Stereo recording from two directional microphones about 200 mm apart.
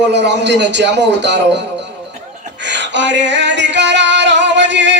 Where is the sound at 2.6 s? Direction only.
60° right (ahead or behind).